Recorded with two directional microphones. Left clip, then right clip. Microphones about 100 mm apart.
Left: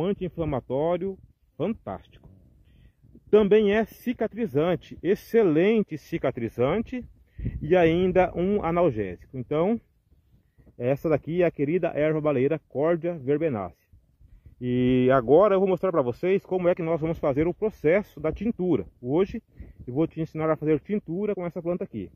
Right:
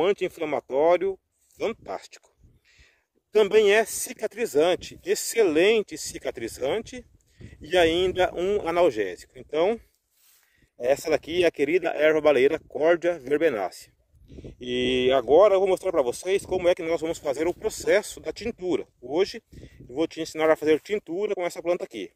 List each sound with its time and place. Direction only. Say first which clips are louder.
0.0 s speech: right 4 dB; 25° right (ahead or behind)
3.3 s speech: right 1 dB; 40° right (ahead or behind)
10.8 s speech: right 2 dB; 35° right (ahead or behind)